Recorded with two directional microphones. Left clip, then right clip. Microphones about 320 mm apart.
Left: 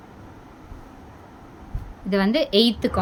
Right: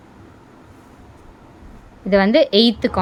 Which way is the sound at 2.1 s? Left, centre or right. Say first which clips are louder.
Right 8 dB; centre.